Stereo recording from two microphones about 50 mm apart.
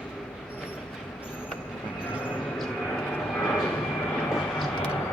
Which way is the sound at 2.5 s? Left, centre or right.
Centre.